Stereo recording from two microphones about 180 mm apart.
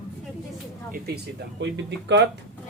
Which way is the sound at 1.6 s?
75° right (ahead or behind).